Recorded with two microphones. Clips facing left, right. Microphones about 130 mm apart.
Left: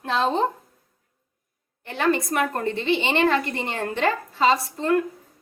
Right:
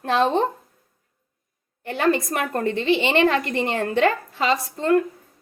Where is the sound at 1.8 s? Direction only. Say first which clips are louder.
Right 2 dB; 50° right (ahead or behind).